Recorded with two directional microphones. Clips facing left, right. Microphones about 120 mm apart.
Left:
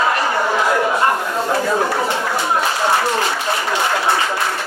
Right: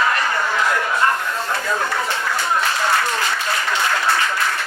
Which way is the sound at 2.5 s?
25° left (ahead or behind).